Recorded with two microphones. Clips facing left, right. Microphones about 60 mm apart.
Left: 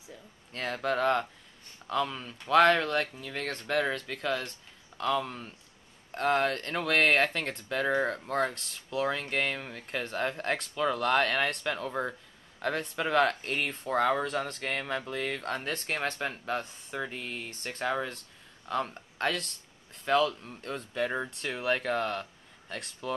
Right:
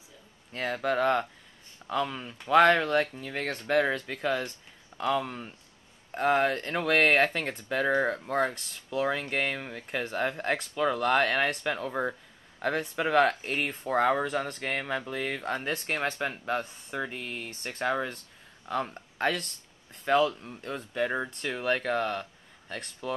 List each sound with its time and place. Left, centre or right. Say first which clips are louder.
0.5 s speech: right 2 dB; centre